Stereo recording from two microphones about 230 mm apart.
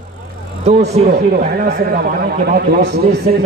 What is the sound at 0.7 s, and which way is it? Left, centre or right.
Speech, right.